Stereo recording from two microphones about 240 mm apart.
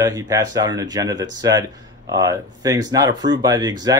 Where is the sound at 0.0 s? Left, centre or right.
Centre.